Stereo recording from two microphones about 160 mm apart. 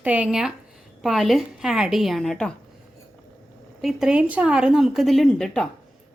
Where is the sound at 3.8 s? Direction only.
Centre (ahead or behind).